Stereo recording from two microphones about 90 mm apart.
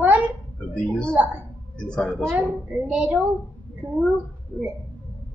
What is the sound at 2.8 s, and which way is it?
Speech, 15° right (ahead or behind).